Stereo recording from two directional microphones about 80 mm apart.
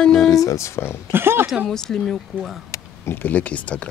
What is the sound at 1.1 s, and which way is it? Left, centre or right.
Speech, right.